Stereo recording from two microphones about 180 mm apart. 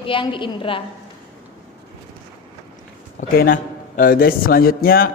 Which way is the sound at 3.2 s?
50° left (ahead or behind).